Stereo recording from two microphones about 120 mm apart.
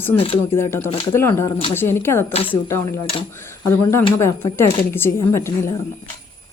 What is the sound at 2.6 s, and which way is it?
Speech, 25° left (ahead or behind).